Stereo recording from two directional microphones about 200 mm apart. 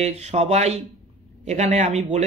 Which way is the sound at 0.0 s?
35° right (ahead or behind).